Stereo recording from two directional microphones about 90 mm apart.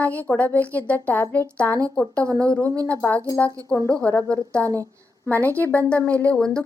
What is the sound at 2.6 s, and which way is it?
Speech, 35° right (ahead or behind).